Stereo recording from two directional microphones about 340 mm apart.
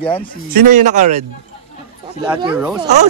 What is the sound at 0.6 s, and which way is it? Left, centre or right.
Speech, right.